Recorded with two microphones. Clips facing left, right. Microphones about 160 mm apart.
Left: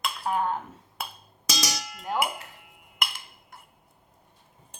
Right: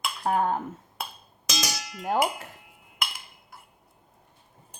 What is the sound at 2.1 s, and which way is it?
Speech, 50° right (ahead or behind).